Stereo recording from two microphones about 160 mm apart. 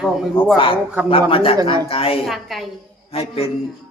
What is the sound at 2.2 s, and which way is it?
Speech, centre (ahead or behind).